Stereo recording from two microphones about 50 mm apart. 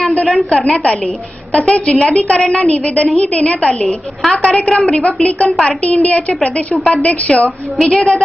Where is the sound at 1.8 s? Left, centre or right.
Centre.